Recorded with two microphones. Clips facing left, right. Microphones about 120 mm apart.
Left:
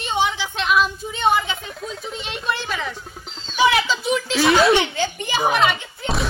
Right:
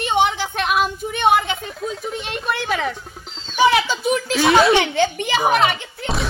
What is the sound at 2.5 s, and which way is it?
Speech, 60° right (ahead or behind).